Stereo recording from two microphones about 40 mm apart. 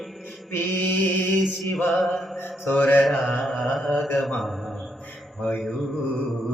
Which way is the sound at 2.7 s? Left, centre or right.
Left.